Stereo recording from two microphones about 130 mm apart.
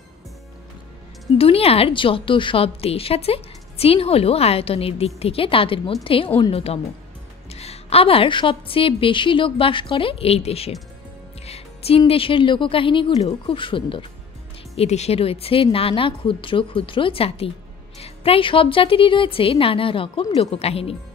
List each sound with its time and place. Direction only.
1.4 s a woman's voice: 50° left (ahead or behind)
11.4 s music: 50° left (ahead or behind)
12.1 s speech: 45° left (ahead or behind)
14.8 s a woman's voice: 55° left (ahead or behind)